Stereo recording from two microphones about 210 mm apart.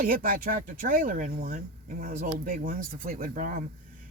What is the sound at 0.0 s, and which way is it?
Speech, 40° right (ahead or behind).